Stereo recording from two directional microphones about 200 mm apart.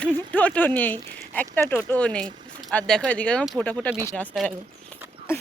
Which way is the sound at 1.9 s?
5° left (ahead or behind).